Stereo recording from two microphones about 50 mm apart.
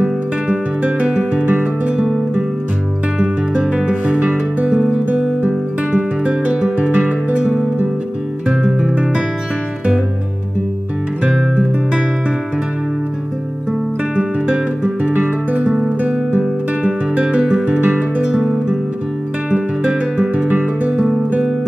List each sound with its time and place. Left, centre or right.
0.0 s music: right
3.7 s music: right
5.4 s music: right
8.5 s music: centre
14.1 s music: right
15.6 s guitar: centre
16.0 s music: right
19.5 s music: right